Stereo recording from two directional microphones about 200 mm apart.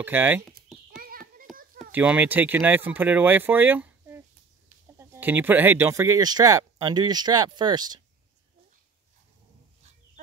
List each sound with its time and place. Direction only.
0.0 s speech: 10° right (ahead or behind)
0.9 s a sound: 45° right (ahead or behind)
1.8 s speech: 5° right (ahead or behind)